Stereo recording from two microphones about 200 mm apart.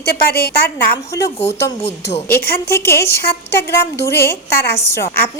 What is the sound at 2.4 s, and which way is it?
Speech, 50° left (ahead or behind).